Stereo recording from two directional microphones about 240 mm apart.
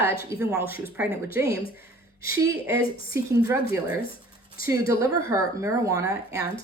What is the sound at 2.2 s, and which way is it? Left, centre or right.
Speech, centre.